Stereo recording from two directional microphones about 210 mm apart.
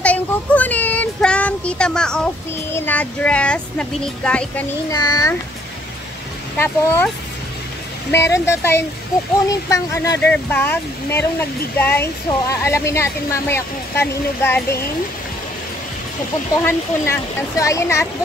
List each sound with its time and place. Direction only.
0.0 s child singing: 5° left (ahead or behind)
2.7 s speech: 10° left (ahead or behind)
4.9 s speech: 15° left (ahead or behind)
6.6 s speech: 10° left (ahead or behind)
8.1 s speech: 15° left (ahead or behind)
16.6 s speech: 10° left (ahead or behind)